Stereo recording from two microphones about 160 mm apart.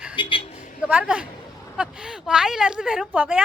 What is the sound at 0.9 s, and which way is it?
A woman's voice, 10° right (ahead or behind).